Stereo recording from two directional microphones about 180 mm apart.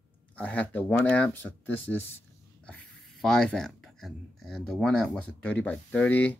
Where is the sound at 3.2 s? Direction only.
5° left (ahead or behind).